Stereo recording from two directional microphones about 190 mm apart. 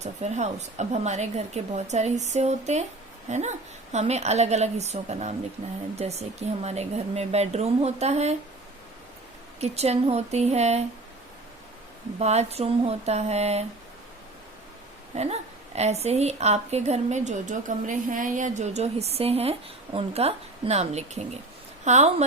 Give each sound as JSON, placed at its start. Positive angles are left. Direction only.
{"t": 0.0, "sound": "a woman's voice", "side_deg": -35}
{"t": 9.6, "sound": "a woman's voice", "side_deg": -35}
{"t": 12.2, "sound": "a woman's voice", "side_deg": -35}
{"t": 15.1, "sound": "a woman's voice", "side_deg": -35}